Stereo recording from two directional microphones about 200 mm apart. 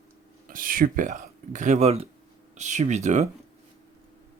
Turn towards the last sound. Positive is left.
turn(degrees=-35)  # may be behind; listen again after turning